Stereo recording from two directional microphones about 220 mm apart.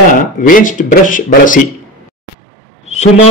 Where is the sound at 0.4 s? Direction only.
35° left (ahead or behind).